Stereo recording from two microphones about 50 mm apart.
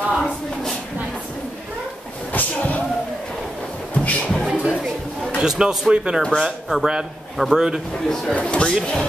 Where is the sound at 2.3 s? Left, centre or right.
Left.